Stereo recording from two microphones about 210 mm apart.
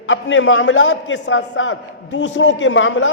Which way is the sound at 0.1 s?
65° left (ahead or behind).